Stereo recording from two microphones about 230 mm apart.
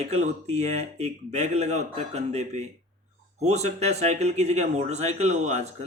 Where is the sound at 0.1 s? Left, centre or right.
Right.